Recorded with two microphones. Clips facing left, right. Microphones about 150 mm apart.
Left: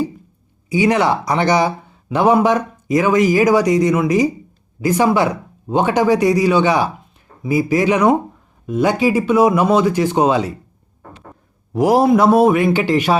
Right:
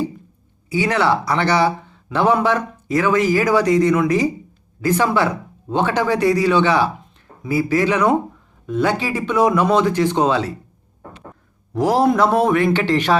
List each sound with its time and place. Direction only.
0.7 s speech: 15° left (ahead or behind)
11.7 s speech: 10° left (ahead or behind)